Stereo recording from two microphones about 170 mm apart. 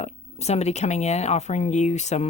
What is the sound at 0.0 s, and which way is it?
Speech, 40° left (ahead or behind).